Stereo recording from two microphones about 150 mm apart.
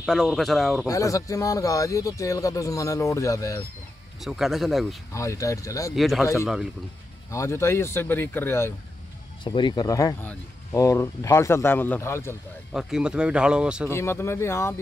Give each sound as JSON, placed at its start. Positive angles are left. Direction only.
{"t": 0.0, "sound": "speech", "side_deg": 0}
{"t": 0.8, "sound": "speech", "side_deg": 20}
{"t": 4.2, "sound": "speech", "side_deg": 0}
{"t": 5.1, "sound": "speech", "side_deg": 20}
{"t": 5.9, "sound": "speech", "side_deg": 0}
{"t": 7.2, "sound": "speech", "side_deg": 20}
{"t": 9.4, "sound": "speech", "side_deg": 30}
{"t": 12.7, "sound": "speech", "side_deg": -5}
{"t": 13.8, "sound": "speech", "side_deg": 15}